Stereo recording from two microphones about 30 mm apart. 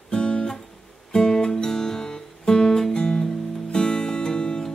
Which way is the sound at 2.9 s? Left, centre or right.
Left.